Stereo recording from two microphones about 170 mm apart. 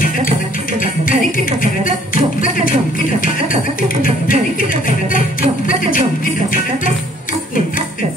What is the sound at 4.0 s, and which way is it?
Music, 55° left (ahead or behind).